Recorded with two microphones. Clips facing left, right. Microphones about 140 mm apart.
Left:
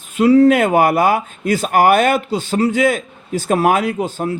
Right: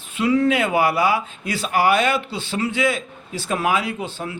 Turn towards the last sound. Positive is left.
turn(degrees=45)  # may be behind; listen again after turning